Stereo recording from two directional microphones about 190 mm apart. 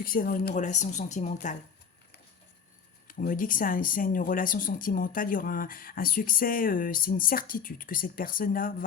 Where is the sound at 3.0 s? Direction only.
45° left (ahead or behind).